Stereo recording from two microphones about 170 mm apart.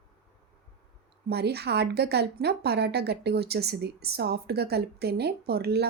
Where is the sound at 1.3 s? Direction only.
70° right (ahead or behind).